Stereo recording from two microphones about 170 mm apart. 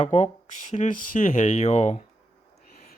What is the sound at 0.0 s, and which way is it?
Speech, 40° left (ahead or behind).